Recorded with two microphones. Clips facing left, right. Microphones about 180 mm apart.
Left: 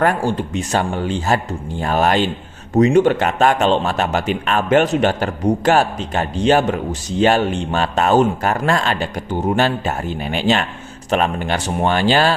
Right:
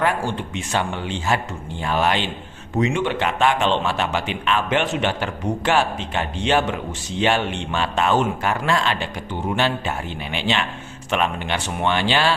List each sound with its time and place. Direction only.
0.0 s a man's voice: 40° left (ahead or behind)